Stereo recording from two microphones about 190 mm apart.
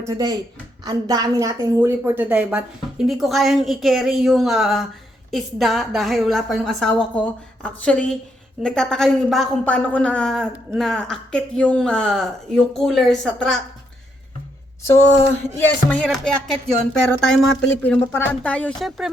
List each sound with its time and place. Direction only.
0.0 s a child's voice: 20° right (ahead or behind); by 13.6 s centre (ahead or behind)
14.8 s a woman's voice: 15° left (ahead or behind)